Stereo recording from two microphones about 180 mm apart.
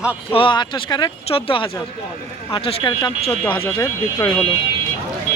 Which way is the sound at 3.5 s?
15° left (ahead or behind).